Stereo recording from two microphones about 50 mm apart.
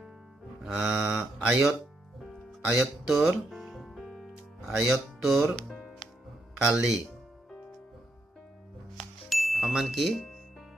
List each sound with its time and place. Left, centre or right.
0.7 s livestock: centre
1.4 s speech: right
2.8 s music: centre
4.6 s speech: centre
6.7 s livestock: centre
8.9 s music: centre